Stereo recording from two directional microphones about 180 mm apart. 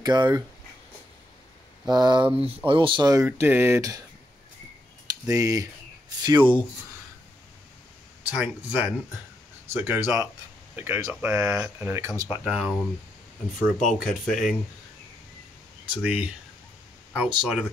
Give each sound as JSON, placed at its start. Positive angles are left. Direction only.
{"t": 0.0, "sound": "speech", "side_deg": -25}
{"t": 1.9, "sound": "speech", "side_deg": -25}
{"t": 3.3, "sound": "speech", "side_deg": -10}
{"t": 5.3, "sound": "speech", "side_deg": -20}
{"t": 8.3, "sound": "speech", "side_deg": -5}
{"t": 16.0, "sound": "speech", "side_deg": -5}